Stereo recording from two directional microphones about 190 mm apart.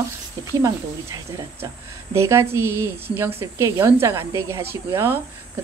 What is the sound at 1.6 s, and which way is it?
Speech, 15° right (ahead or behind).